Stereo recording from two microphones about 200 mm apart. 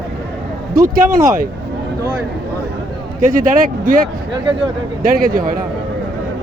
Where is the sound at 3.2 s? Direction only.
40° right (ahead or behind).